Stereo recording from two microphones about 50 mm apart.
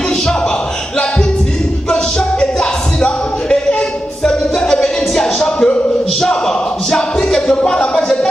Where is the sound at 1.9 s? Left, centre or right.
Centre.